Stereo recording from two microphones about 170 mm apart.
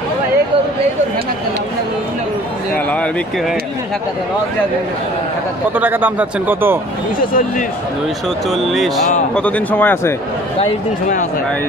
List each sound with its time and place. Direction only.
2.7 s a sound: 10° left (ahead or behind)
5.8 s speech: 10° right (ahead or behind)
7.2 s speech: 55° left (ahead or behind)
8.5 s speech: centre (ahead or behind)
10.6 s speech: 50° left (ahead or behind)